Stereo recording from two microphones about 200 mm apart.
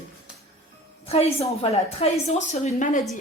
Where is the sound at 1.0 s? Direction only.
30° left (ahead or behind).